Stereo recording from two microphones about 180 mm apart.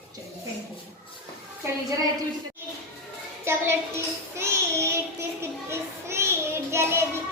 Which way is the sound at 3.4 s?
15° right (ahead or behind).